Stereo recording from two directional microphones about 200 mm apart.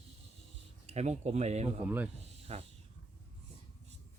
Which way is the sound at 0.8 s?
35° right (ahead or behind).